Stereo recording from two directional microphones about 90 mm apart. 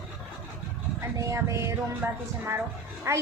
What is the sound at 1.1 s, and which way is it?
A woman's voice, 35° right (ahead or behind).